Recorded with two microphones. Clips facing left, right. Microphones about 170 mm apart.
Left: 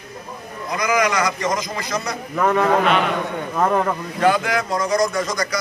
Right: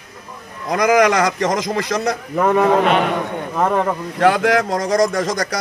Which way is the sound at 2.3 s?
15° right (ahead or behind).